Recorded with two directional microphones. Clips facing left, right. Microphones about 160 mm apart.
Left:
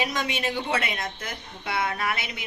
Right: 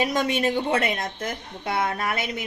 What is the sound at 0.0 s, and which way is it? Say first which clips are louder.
Speech: right 5 dB; 45° right (ahead or behind).